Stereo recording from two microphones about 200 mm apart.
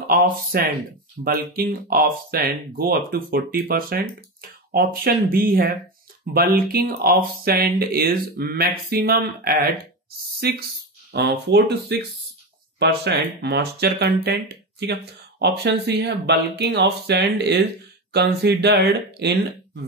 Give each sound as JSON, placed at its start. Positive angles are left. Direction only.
{"t": 0.1, "sound": "speech", "side_deg": -50}